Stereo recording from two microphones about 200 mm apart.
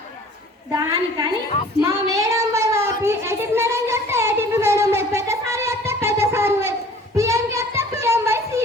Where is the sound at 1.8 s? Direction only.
15° right (ahead or behind).